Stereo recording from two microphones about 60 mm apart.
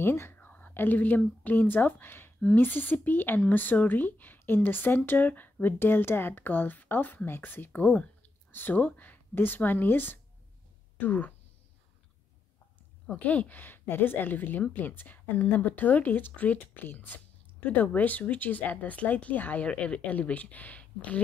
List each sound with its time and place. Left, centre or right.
0.0 s whispering: left
0.5 s whispering: left
0.7 s speech: left
13.1 s speech: left